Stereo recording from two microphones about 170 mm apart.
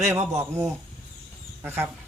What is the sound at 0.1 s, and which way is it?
Speech, 15° right (ahead or behind).